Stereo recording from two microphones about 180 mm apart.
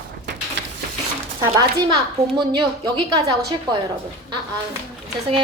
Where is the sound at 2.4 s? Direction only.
25° right (ahead or behind).